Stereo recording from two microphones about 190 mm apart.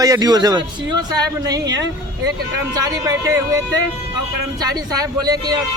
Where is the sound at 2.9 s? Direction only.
20° right (ahead or behind).